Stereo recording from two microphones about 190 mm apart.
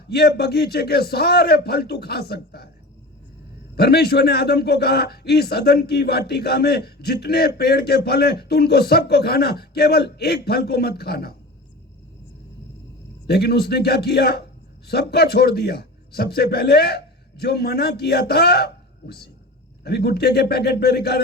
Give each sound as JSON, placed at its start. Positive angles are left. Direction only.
{"t": 0.1, "sound": "a man's voice", "side_deg": 55}
{"t": 3.8, "sound": "a man's voice", "side_deg": 55}
{"t": 13.2, "sound": "a man's voice", "side_deg": 60}